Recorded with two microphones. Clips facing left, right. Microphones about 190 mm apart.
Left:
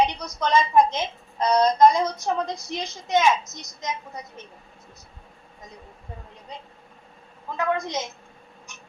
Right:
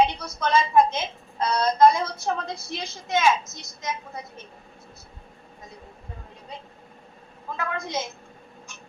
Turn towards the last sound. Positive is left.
turn(degrees=20)  # may be behind; listen again after turning